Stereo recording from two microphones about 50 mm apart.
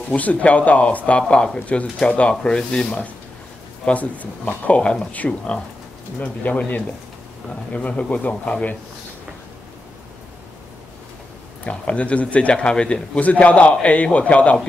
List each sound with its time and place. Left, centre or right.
0.1 s a man's voice: left
7.7 s a man's voice: left
11.6 s a man's voice: left